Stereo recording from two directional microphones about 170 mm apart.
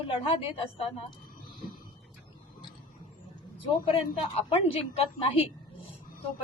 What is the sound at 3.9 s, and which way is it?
A woman's voice, 35° left (ahead or behind).